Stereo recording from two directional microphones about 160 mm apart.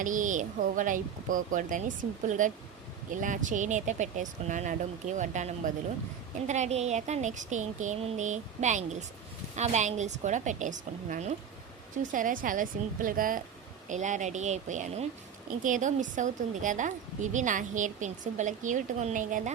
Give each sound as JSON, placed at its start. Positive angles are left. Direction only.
{"t": 0.0, "sound": "a woman's voice", "side_deg": -55}